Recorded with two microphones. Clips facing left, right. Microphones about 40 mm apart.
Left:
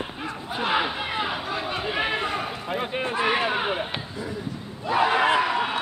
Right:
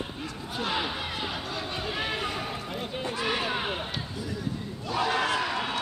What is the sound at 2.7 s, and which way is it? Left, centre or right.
Speech, left.